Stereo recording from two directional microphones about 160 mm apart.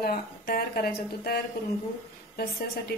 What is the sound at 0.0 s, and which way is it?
A woman's voice, 80° left.